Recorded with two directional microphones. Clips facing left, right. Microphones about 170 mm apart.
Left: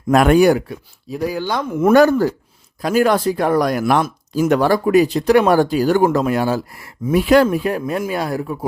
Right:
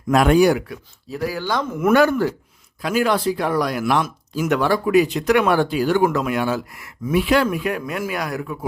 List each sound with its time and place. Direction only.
0.1 s speech: 55° left (ahead or behind)
1.1 s speech: 20° left (ahead or behind)
1.8 s speech: 40° left (ahead or behind)